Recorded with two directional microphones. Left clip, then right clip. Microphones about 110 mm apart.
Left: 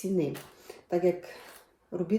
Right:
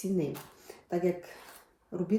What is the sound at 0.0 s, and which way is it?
Speech, 10° left (ahead or behind).